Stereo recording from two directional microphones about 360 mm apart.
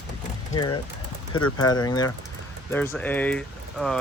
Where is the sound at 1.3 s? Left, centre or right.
Left.